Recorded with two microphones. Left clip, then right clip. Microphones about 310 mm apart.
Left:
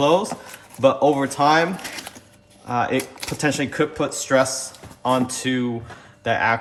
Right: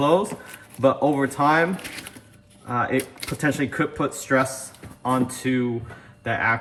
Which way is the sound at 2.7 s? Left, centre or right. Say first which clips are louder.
Left 2 dB; centre.